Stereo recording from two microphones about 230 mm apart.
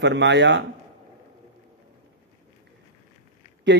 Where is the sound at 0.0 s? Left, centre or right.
Right.